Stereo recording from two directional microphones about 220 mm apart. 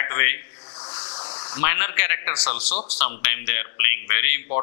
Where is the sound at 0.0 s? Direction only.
15° left (ahead or behind).